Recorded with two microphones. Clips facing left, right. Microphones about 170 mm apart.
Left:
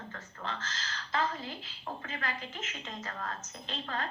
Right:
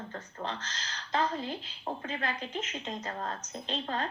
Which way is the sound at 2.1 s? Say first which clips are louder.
Right 3 dB; 30° right (ahead or behind).